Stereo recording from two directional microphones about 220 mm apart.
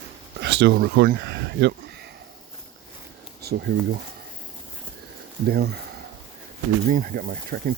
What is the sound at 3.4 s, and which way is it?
Speech, 45° right (ahead or behind).